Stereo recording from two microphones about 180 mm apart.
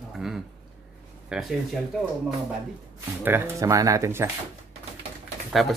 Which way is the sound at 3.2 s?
10° right (ahead or behind).